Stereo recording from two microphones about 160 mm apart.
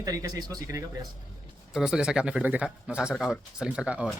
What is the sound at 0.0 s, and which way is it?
Speech, 20° right (ahead or behind).